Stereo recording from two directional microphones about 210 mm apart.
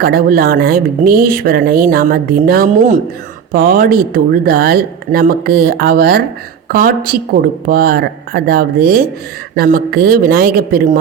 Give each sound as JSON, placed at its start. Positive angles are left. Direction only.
{"t": 0.0, "sound": "speech", "side_deg": -45}